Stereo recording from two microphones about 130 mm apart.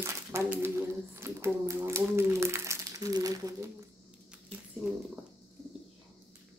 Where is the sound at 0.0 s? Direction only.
20° right (ahead or behind).